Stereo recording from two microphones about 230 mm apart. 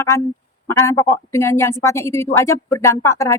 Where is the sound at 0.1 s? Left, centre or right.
Centre.